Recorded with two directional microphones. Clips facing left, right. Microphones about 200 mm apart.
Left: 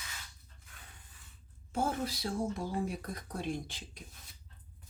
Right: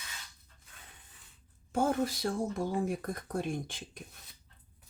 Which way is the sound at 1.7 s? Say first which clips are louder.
Right 4 dB; 50° right (ahead or behind).